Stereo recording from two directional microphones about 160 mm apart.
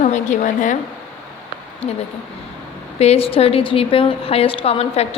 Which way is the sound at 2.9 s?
40° left (ahead or behind).